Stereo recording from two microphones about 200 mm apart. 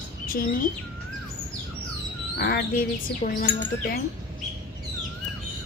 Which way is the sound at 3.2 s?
35° left (ahead or behind).